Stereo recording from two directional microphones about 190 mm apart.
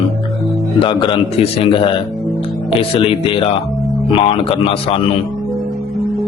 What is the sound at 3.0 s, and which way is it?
Speech, 30° left (ahead or behind).